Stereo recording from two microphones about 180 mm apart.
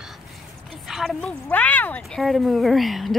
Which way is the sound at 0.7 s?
Centre (ahead or behind).